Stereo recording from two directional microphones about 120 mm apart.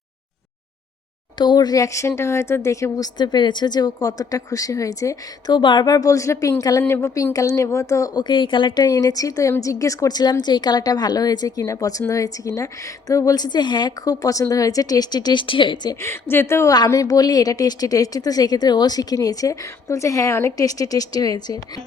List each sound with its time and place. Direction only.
1.4 s speech: 35° left (ahead or behind)
5.5 s a woman's voice: 40° left (ahead or behind)
16.0 s a woman's voice: 20° left (ahead or behind)